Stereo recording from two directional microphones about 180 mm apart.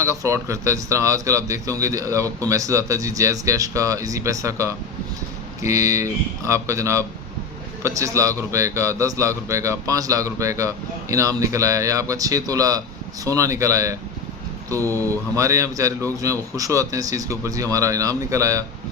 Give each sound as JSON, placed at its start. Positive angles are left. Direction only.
{"t": 0.0, "sound": "a man's voice", "side_deg": -15}
{"t": 14.9, "sound": "mantra", "side_deg": 10}
{"t": 15.4, "sound": "a man's voice", "side_deg": -15}